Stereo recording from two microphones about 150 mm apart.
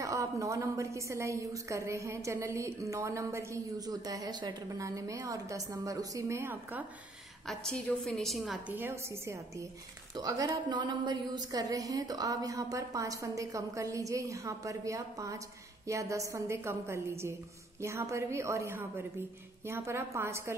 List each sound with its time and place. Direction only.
0.0 s a woman's voice: 20° right (ahead or behind)
7.4 s a woman's voice: 5° left (ahead or behind)
8.7 s a woman's voice: 15° right (ahead or behind)